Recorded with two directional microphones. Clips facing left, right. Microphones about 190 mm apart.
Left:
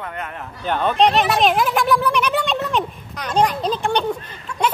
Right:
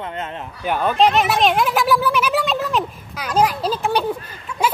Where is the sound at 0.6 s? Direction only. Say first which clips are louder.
Even; 5° right (ahead or behind).